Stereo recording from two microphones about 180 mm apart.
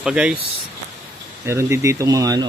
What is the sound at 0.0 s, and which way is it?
Speech, 5° right (ahead or behind).